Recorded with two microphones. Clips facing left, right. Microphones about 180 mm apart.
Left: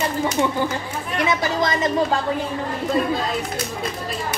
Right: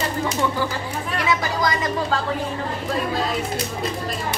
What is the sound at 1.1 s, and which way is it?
Speech, 20° left (ahead or behind).